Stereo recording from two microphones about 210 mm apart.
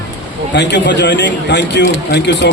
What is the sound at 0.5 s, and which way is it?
A man's voice, 55° left (ahead or behind).